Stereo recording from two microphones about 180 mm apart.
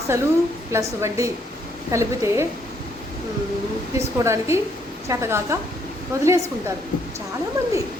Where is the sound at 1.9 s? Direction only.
15° right (ahead or behind).